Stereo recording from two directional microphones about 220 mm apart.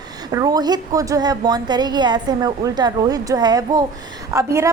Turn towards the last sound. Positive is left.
turn(degrees=-15)  # may be behind; listen again after turning